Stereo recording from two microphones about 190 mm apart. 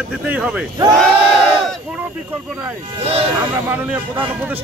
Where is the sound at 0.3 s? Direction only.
5° right (ahead or behind).